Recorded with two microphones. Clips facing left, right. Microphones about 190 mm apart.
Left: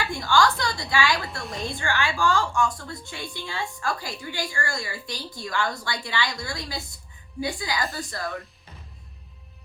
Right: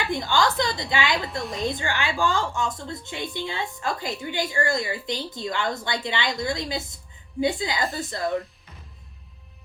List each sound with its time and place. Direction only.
0.0 s a woman's voice: 20° right (ahead or behind)